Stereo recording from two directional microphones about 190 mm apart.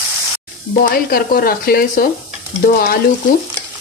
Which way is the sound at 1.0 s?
50° left (ahead or behind).